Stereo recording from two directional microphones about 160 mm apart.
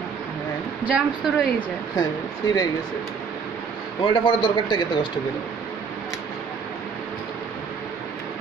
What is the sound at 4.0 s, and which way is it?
Speech, 30° left (ahead or behind).